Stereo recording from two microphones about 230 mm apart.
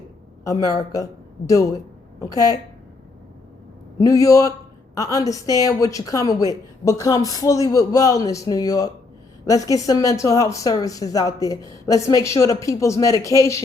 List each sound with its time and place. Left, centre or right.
0.4 s a woman's voice: centre
2.1 s a woman's voice: centre
4.0 s a woman's voice: centre